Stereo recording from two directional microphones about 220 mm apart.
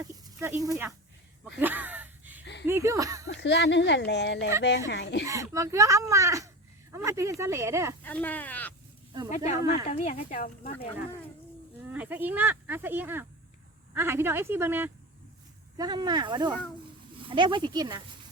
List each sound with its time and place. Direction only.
0.0 s snake: 15° right (ahead or behind)
0.6 s speech: 15° right (ahead or behind)
1.5 s gasp: 10° right (ahead or behind)
2.4 s a sound: 50° left (ahead or behind)
2.6 s speech: 10° right (ahead or behind)
3.2 s speech: 55° left (ahead or behind)
5.2 s speech: 15° right (ahead or behind)
8.0 s speech: 5° left (ahead or behind)
9.3 s speech: 35° left (ahead or behind)
10.7 s speech: 25° left (ahead or behind)
11.9 s speech: 10° right (ahead or behind)